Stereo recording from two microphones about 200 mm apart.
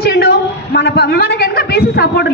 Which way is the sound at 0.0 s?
50° left (ahead or behind).